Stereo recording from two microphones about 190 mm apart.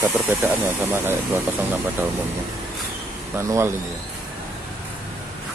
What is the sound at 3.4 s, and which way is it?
Speech, 15° right (ahead or behind).